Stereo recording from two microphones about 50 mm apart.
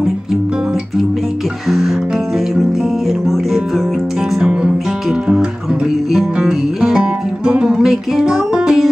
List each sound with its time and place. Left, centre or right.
1.7 s music: centre